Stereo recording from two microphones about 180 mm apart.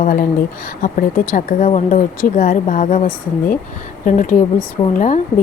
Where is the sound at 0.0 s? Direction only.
55° left (ahead or behind).